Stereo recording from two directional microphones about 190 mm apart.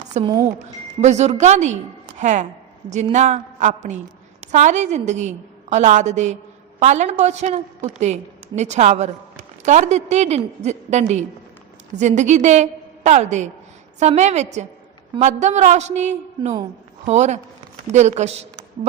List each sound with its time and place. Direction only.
0.3 s speech: 20° right (ahead or behind)
1.0 s a woman's voice: 35° right (ahead or behind)